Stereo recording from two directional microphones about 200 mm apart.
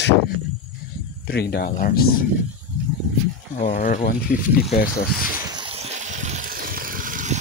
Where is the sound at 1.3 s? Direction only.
55° left (ahead or behind).